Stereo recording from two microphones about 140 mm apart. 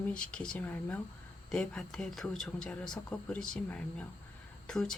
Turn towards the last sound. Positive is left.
turn(degrees=5)  # may be behind; listen again after turning